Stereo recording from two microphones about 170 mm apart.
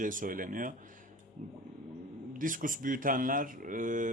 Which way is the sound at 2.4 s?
50° right (ahead or behind).